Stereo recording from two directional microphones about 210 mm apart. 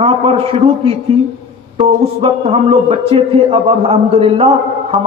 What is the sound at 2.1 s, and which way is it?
A man's voice, 30° right (ahead or behind).